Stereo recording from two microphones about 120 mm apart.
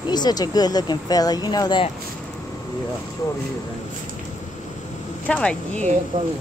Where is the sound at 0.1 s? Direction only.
35° left (ahead or behind).